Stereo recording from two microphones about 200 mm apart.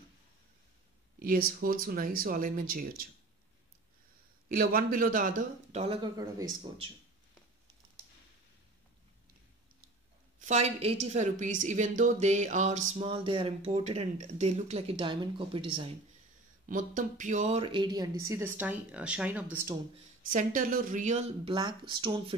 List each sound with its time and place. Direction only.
1.2 s speech: 45° right (ahead or behind)
4.5 s speech: 45° right (ahead or behind); by 6.9 s 20° right (ahead or behind)
10.4 s speech: 35° right (ahead or behind)
16.6 s speech: 40° right (ahead or behind); by 19.7 s 10° right (ahead or behind)
20.2 s speech: 45° right (ahead or behind)
21.5 s speech: 20° right (ahead or behind)